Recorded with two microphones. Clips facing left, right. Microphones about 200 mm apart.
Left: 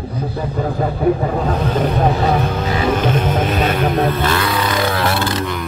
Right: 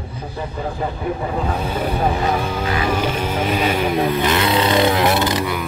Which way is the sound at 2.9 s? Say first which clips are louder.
Left 4 dB; 10° right (ahead or behind).